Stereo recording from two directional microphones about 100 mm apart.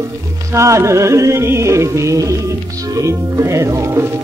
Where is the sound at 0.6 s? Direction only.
30° right (ahead or behind).